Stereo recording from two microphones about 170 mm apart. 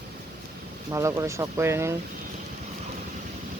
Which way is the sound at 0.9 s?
20° right (ahead or behind).